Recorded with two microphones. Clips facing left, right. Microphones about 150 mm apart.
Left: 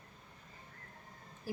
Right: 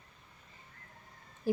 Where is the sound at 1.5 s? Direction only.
20° right (ahead or behind).